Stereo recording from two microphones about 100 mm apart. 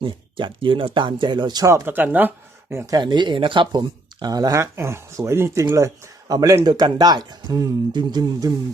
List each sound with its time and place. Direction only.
0.0 s speech: 55° right (ahead or behind)
1.6 s speech: 25° right (ahead or behind)
2.9 s speech: 50° right (ahead or behind)
4.6 s speech: 25° right (ahead or behind)